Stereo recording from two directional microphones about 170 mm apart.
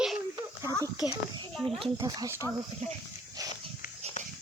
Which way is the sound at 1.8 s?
30° right (ahead or behind).